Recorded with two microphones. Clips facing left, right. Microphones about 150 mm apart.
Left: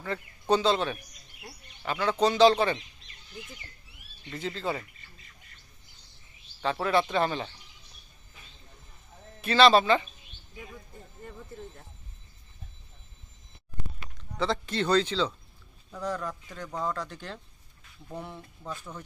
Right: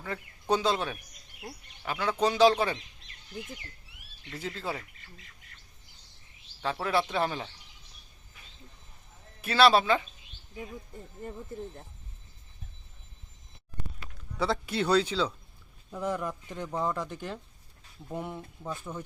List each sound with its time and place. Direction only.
0.0 s a man's voice: 5° right (ahead or behind)
4.3 s speech: 10° right (ahead or behind)
6.6 s a man's voice: centre (ahead or behind)
9.4 s a man's voice: 10° right (ahead or behind)
14.3 s a man's voice: 10° right (ahead or behind)